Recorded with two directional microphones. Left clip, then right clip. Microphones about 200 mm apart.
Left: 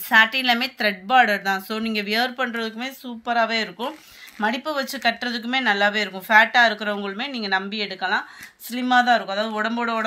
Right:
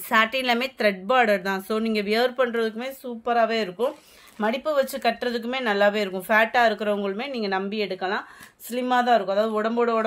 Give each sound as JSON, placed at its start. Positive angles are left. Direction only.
{"t": 0.1, "sound": "speech", "side_deg": -55}